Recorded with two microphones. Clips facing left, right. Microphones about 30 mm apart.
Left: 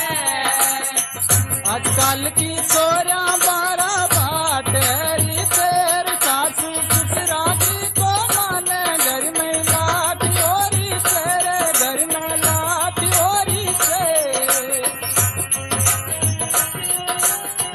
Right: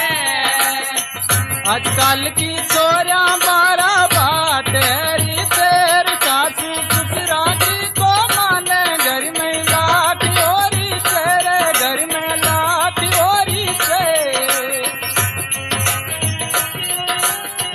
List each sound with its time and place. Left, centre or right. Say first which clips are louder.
0.0 s music: right 4 dB; right
4.6 s music: right 4 dB; right
5.0 s music: right 4 dB; right
5.7 s music: right 5 dB; right
9.8 s music: right 6 dB; right
10.0 s music: right 5 dB; right
10.6 s music: right 4 dB; right
13.3 s music: right 4 dB; right